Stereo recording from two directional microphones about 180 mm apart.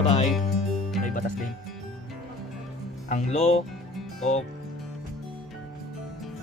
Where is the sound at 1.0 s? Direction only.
45° left (ahead or behind).